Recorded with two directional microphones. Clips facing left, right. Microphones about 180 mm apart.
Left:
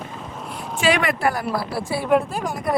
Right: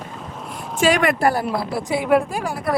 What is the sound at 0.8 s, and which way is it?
Speech, 45° right (ahead or behind).